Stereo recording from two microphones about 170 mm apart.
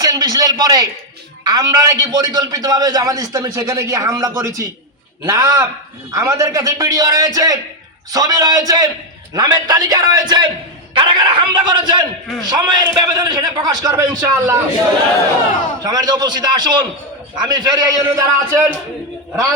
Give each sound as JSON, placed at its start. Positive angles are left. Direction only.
{"t": 0.0, "sound": "a sound", "side_deg": -20}
{"t": 1.5, "sound": "a man's voice", "side_deg": -25}
{"t": 15.8, "sound": "a man's voice", "side_deg": -25}